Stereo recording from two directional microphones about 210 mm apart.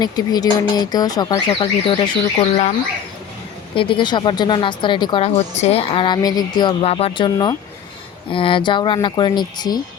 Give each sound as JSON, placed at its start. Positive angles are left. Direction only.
{"t": 0.0, "sound": "speech", "side_deg": 20}
{"t": 3.8, "sound": "speech", "side_deg": 25}